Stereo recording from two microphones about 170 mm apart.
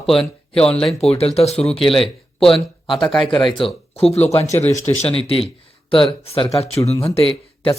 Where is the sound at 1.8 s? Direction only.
Centre (ahead or behind).